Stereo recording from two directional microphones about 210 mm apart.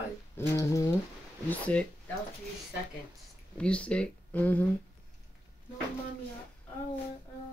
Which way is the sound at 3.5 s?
5° left (ahead or behind).